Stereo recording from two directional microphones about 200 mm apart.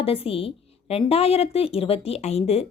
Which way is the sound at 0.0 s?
30° left (ahead or behind).